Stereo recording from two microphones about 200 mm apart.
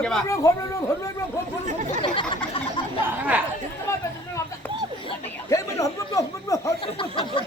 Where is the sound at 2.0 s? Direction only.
25° left (ahead or behind).